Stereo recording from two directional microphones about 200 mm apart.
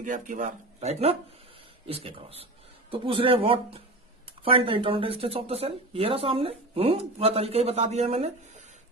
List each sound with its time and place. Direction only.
0.0 s speech: 40° right (ahead or behind)